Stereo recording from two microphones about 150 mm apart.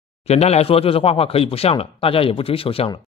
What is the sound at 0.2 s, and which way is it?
Speech, 45° left (ahead or behind).